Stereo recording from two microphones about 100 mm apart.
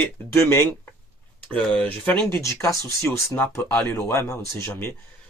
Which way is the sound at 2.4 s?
30° left (ahead or behind).